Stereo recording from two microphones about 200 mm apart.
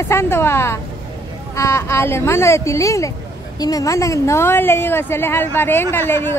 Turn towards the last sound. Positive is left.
turn(degrees=10)  # may be behind; listen again after turning